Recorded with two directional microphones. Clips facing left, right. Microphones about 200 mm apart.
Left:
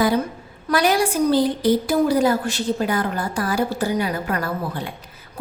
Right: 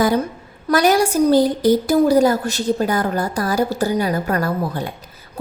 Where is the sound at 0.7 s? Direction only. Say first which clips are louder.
Right 4 dB; 45° right (ahead or behind).